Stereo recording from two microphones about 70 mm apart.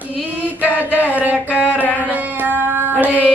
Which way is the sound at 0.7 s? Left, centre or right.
Left.